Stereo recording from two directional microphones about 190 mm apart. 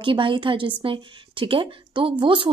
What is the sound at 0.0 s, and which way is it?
A woman's voice, 25° right (ahead or behind).